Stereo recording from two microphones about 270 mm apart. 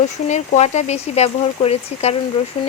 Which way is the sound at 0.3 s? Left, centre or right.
Left.